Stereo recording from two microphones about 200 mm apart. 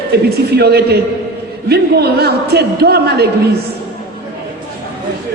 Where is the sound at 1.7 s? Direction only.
55° right (ahead or behind).